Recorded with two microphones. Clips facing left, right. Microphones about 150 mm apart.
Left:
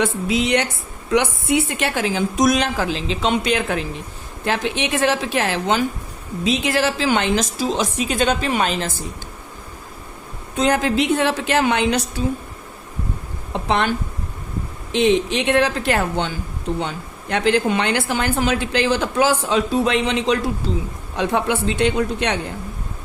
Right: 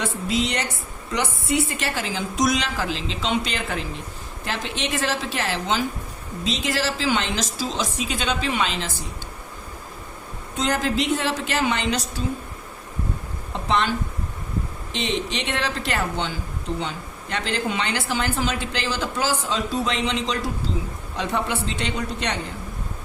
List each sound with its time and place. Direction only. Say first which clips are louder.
0.0 s speech: left 5 dB; 65° left (ahead or behind)
10.6 s speech: left 5 dB; 60° left (ahead or behind)
13.7 s speech: left 3 dB; 55° left (ahead or behind)
14.9 s speech: left 9 dB; 55° left (ahead or behind)